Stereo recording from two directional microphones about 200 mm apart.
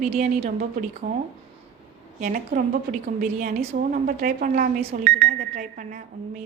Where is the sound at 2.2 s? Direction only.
45° right (ahead or behind).